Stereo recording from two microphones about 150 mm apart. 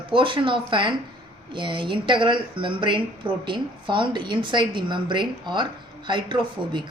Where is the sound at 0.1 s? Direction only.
35° right (ahead or behind).